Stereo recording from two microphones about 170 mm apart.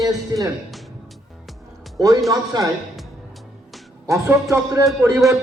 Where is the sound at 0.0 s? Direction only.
20° right (ahead or behind).